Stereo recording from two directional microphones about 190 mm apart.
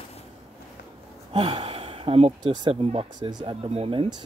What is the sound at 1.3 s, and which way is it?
Speech, 30° right (ahead or behind).